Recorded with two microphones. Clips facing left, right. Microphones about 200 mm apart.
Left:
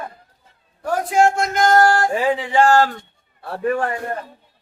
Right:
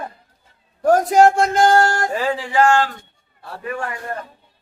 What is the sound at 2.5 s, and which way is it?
A man's voice, 35° left (ahead or behind).